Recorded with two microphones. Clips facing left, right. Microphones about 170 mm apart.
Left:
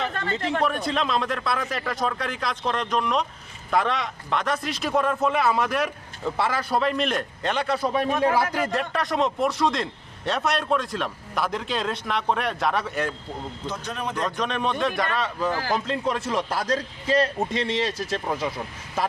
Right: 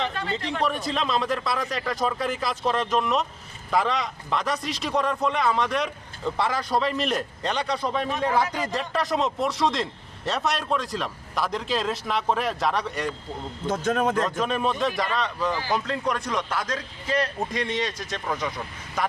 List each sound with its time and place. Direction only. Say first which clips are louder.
0.1 s speech: left 1 dB; 50° left (ahead or behind)
0.6 s a man's voice: right 1 dB; centre (ahead or behind)
13.7 s a man's voice: right 9 dB; 50° right (ahead or behind)
14.2 s speech: right 2 dB; centre (ahead or behind)
15.9 s a man's voice: left 1 dB; 25° left (ahead or behind)